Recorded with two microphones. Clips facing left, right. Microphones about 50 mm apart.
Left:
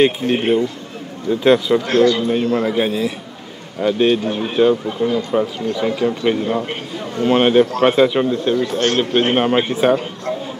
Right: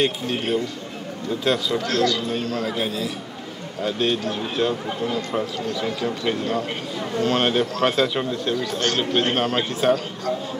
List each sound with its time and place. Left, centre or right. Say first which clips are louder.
0.0 s speech: left 8 dB; left
8.7 s speech: left 6 dB; left
9.1 s speech: left 6 dB; left